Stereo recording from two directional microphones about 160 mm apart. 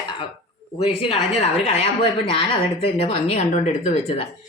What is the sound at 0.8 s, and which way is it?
A woman's voice, 35° left (ahead or behind).